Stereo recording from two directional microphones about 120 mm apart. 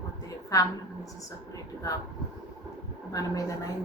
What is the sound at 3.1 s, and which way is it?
Speech, 30° left (ahead or behind).